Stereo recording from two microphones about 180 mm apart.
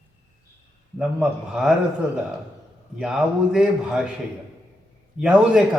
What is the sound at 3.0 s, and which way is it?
A man's voice, 5° right (ahead or behind).